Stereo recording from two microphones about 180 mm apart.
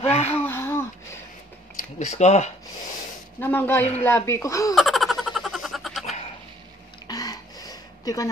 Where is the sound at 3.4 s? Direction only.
10° left (ahead or behind).